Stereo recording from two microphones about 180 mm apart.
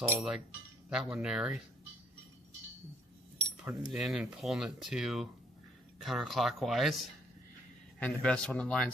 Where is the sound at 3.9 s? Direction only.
5° right (ahead or behind).